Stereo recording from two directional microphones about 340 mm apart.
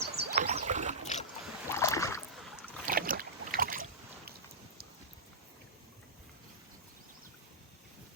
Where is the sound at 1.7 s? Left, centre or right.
Centre.